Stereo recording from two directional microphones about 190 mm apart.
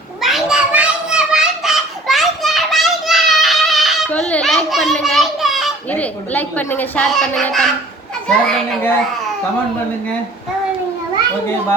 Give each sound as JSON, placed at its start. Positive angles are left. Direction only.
{"t": 0.2, "sound": "children playing", "side_deg": 0}
{"t": 8.3, "sound": "a child's voice", "side_deg": 5}